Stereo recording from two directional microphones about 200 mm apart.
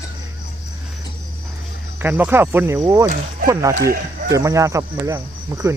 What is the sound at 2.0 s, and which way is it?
Cricket, 10° right (ahead or behind).